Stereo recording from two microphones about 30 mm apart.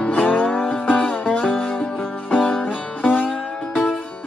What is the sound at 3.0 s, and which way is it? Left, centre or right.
Music, left.